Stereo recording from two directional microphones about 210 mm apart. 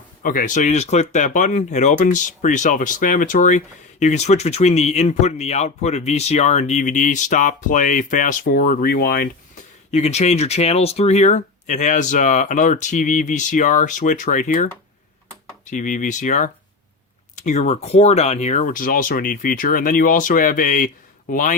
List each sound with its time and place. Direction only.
0.2 s speech: 40° left (ahead or behind)
9.9 s speech: 30° left (ahead or behind)
15.7 s speech: 35° left (ahead or behind)